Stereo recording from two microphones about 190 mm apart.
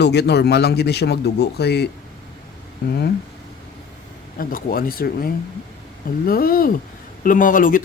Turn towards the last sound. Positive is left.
turn(degrees=45)  # may be behind; listen again after turning